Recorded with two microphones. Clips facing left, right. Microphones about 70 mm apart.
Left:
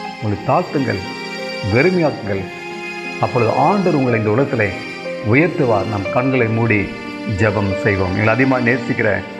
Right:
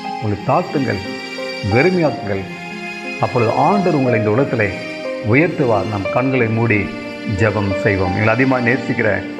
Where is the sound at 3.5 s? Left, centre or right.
Left.